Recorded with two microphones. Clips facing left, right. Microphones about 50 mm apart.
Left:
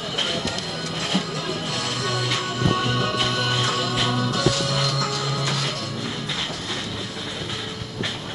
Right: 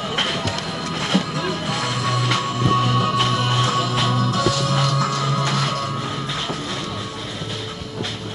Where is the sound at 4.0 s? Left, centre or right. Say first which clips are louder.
Right 3 dB; right.